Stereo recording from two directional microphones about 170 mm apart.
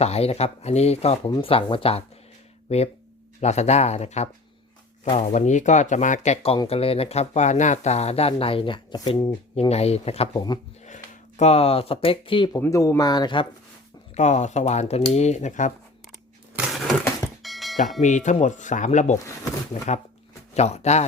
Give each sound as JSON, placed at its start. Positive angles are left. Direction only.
{"t": 0.0, "sound": "speech", "side_deg": 40}
{"t": 9.6, "sound": "speech", "side_deg": 40}
{"t": 12.5, "sound": "speech", "side_deg": 15}
{"t": 14.2, "sound": "speech", "side_deg": 45}
{"t": 16.6, "sound": "a sound", "side_deg": 0}
{"t": 17.4, "sound": "bell", "side_deg": 0}
{"t": 18.0, "sound": "speech", "side_deg": 45}